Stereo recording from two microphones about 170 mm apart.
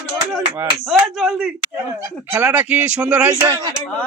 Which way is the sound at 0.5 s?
5° right (ahead or behind).